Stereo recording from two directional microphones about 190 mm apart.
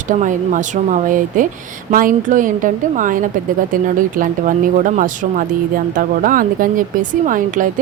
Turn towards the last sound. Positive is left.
turn(degrees=-45)  # may be behind; listen again after turning